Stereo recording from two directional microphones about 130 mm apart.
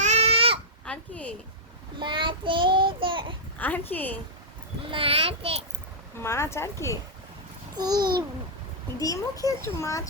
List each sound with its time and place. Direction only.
0.0 s a sound: 55° right (ahead or behind)
0.9 s speech: 10° left (ahead or behind)
2.0 s child singing: 40° right (ahead or behind)
3.6 s a woman's voice: 15° left (ahead or behind)
4.9 s a child's voice: 45° right (ahead or behind)
6.1 s a child's voice: 20° left (ahead or behind)
7.8 s a child's voice: 30° right (ahead or behind)
9.0 s a child's voice: 25° left (ahead or behind)